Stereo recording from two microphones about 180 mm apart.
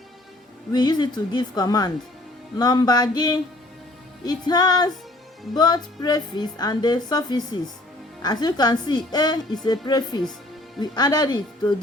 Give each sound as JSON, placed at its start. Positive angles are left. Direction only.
{"t": 0.7, "sound": "a woman's voice", "side_deg": 25}